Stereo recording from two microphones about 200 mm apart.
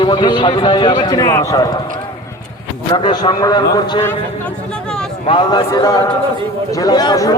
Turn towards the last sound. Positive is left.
turn(degrees=20)  # may be behind; listen again after turning